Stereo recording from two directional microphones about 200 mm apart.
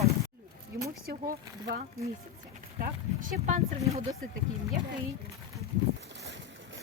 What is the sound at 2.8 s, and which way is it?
Speech, 45° right (ahead or behind).